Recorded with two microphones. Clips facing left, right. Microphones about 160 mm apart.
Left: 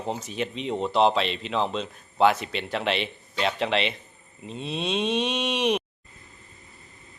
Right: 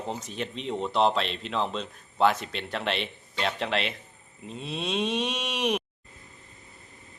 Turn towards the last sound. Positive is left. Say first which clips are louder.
# left 4 dB
turn(degrees=0)  # may be behind; listen again after turning